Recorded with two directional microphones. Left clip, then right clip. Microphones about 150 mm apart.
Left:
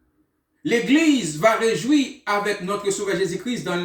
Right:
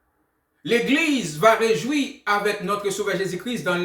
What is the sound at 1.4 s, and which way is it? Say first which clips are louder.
Speech: right 2 dB; 25° right (ahead or behind).